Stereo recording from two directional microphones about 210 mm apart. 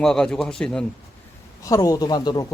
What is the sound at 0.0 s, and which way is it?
Speech, centre (ahead or behind).